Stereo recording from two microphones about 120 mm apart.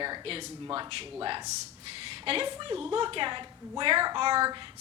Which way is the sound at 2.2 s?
50° right (ahead or behind).